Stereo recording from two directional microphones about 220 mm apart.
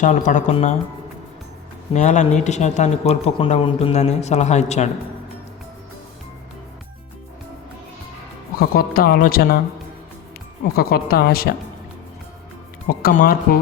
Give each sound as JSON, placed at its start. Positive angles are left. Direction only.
{"t": 0.0, "sound": "speech", "side_deg": 35}
{"t": 1.9, "sound": "speech", "side_deg": 30}
{"t": 8.5, "sound": "speech", "side_deg": 40}
{"t": 10.8, "sound": "a woman's voice", "side_deg": 45}
{"t": 12.9, "sound": "speech", "side_deg": 40}